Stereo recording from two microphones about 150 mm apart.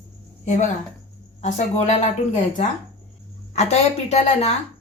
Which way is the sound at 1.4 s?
50° left (ahead or behind).